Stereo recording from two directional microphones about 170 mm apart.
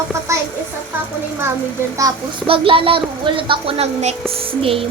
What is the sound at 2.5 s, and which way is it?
Speech, 30° right (ahead or behind).